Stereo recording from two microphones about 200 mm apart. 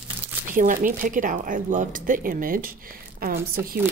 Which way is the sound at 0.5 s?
40° right (ahead or behind).